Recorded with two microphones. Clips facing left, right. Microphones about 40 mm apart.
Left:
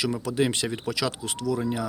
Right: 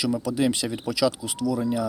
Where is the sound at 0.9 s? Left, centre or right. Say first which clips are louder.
Right 4 dB; left.